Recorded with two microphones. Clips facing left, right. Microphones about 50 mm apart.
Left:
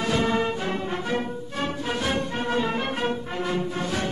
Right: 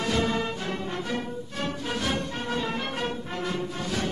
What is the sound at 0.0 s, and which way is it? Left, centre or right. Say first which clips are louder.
Music: left 3 dB; centre.